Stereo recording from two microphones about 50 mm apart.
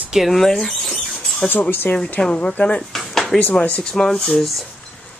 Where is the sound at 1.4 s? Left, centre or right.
Left.